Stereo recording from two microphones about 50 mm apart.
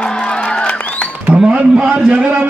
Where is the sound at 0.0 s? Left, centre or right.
Left.